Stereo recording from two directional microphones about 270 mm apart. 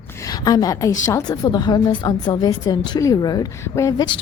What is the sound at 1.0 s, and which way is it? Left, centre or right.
A woman's voice, centre.